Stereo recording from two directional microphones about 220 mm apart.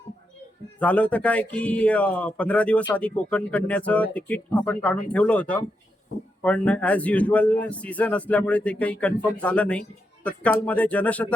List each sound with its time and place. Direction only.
0.8 s a man's voice: 5° left (ahead or behind)